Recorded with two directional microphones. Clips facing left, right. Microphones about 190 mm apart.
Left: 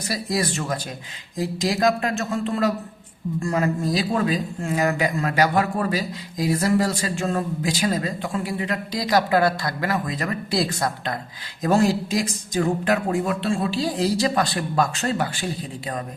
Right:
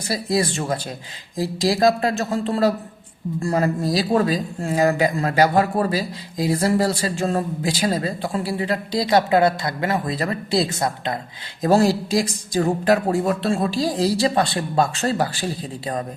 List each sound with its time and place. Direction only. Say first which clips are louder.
0.1 s speech: right 3 dB; 25° right (ahead or behind)
11.6 s speech: right 2 dB; 35° right (ahead or behind)